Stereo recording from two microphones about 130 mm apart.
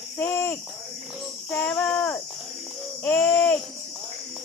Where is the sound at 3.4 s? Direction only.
15° left (ahead or behind).